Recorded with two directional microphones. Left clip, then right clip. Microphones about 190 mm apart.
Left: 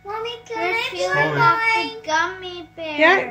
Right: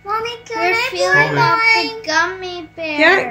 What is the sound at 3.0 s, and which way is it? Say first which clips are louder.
Speech: right 3 dB; centre (ahead or behind).